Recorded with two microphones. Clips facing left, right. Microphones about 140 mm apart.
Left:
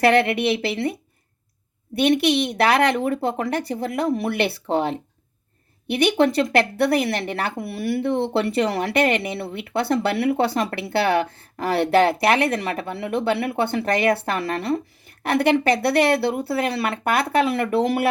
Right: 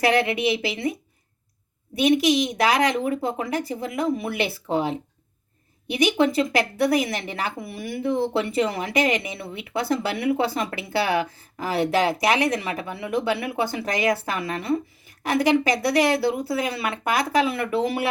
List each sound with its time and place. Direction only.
0.0 s speech: 60° left (ahead or behind)
2.0 s speech: 60° left (ahead or behind)